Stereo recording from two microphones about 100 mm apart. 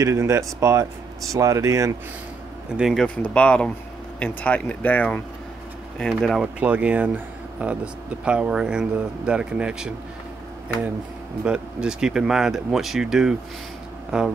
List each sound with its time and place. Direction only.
0.0 s speech: 30° right (ahead or behind)
2.8 s speech: centre (ahead or behind)
6.4 s speech: 15° right (ahead or behind)
11.4 s speech: 10° right (ahead or behind)